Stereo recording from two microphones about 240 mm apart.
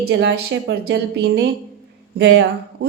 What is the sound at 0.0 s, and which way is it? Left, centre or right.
A woman's voice, right.